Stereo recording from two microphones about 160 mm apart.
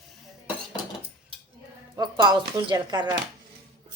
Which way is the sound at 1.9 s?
30° right (ahead or behind).